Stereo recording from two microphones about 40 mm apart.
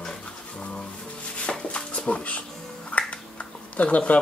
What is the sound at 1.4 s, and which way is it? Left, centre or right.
Chopping, left.